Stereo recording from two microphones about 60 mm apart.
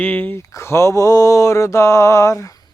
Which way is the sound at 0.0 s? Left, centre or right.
Left.